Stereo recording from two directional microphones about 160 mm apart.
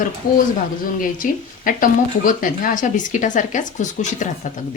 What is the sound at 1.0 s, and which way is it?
Speech, 60° left (ahead or behind).